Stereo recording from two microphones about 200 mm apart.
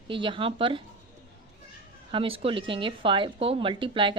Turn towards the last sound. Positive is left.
turn(degrees=-25)  # may be behind; listen again after turning